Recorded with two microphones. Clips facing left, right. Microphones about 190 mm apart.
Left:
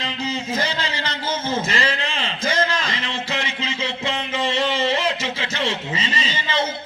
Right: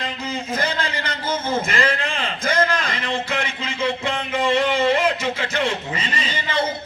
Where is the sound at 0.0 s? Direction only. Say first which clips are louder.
Left 1 dB; 55° right (ahead or behind).